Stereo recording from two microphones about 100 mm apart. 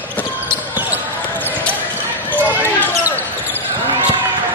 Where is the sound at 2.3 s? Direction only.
15° left (ahead or behind).